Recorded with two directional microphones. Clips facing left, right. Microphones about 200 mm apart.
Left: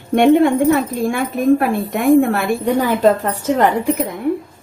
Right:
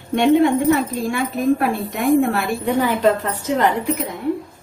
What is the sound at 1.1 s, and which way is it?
A woman's voice, 50° left (ahead or behind).